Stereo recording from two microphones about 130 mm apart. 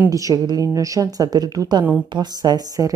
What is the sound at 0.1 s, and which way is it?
Speech, 25° right (ahead or behind).